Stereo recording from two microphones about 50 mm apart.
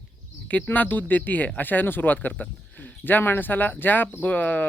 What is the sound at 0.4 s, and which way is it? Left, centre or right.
Speech, left.